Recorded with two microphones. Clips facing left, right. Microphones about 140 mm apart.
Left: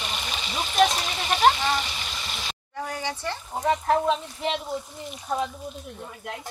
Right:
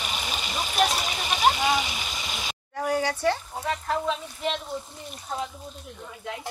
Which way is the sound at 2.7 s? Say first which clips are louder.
Right 6 dB; 90° right.